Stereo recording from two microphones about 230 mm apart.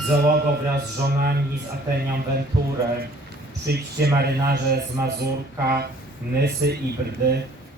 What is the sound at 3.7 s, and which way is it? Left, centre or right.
A man's voice, right.